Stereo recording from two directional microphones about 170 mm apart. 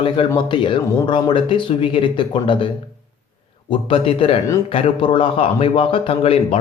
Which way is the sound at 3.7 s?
30° left (ahead or behind).